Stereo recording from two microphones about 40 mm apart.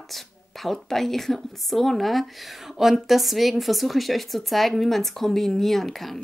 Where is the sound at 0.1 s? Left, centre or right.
Centre.